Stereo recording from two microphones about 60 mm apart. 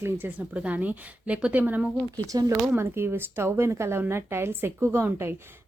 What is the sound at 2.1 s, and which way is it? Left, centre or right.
Speech, right.